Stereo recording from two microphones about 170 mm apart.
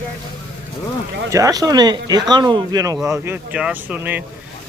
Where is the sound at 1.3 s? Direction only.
20° right (ahead or behind).